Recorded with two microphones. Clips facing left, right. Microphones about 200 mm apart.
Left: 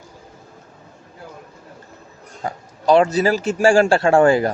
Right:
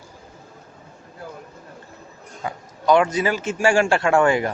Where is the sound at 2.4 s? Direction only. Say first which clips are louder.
Left 2 dB; 30° left (ahead or behind).